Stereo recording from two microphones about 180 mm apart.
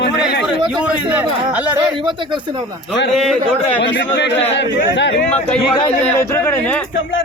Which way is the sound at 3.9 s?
70° left (ahead or behind).